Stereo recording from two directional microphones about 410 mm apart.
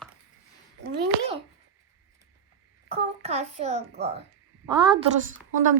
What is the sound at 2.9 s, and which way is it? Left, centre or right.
A child's voice, centre.